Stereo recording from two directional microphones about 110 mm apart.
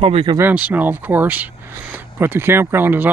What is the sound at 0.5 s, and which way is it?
Speech, 15° right (ahead or behind).